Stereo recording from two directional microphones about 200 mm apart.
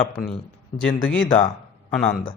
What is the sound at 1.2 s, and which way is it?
Speech, 30° left (ahead or behind).